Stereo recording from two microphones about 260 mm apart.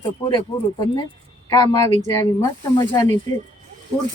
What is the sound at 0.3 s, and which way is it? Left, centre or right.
Speech, centre.